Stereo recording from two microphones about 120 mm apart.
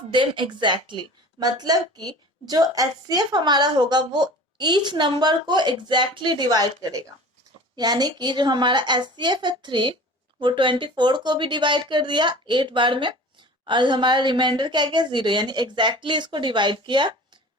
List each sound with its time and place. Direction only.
0.1 s speech: 45° right (ahead or behind)
7.8 s speech: 35° right (ahead or behind)